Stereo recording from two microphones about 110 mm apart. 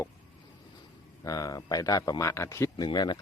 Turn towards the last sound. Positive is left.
turn(degrees=40)  # may be behind; listen again after turning